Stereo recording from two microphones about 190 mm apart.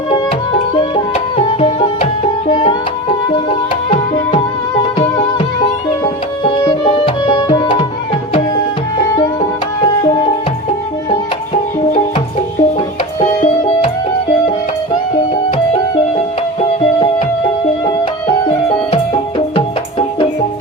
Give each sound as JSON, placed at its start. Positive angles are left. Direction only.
{"t": 0.8, "sound": "music", "side_deg": 30}
{"t": 6.7, "sound": "music", "side_deg": 25}
{"t": 9.8, "sound": "music", "side_deg": 25}
{"t": 13.1, "sound": "music", "side_deg": 35}
{"t": 16.6, "sound": "music", "side_deg": 30}